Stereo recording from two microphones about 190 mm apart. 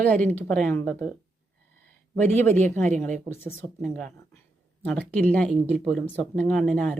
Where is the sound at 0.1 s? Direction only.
10° left (ahead or behind).